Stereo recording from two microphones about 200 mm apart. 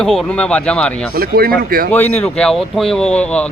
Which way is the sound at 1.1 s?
50° right (ahead or behind).